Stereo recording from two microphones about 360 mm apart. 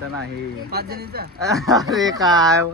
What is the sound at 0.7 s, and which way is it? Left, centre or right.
Speech, right.